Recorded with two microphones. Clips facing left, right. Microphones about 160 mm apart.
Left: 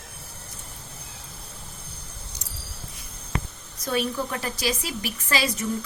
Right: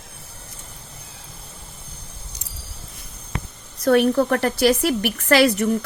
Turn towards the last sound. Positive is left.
turn(degrees=-70)  # may be behind; listen again after turning